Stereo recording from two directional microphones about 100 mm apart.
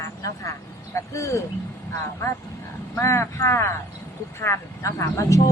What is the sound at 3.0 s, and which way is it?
Speech, 25° left (ahead or behind).